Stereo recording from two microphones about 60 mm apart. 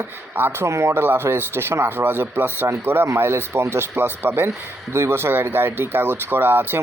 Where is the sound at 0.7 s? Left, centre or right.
Right.